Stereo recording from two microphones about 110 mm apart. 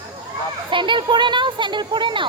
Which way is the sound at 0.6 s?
50° right (ahead or behind).